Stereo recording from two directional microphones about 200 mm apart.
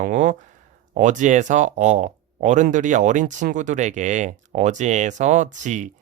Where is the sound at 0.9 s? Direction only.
40° right (ahead or behind).